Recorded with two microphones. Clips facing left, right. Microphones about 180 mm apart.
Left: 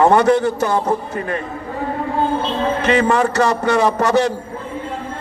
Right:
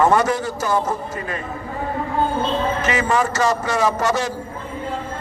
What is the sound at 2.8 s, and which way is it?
A man's voice, 60° left (ahead or behind).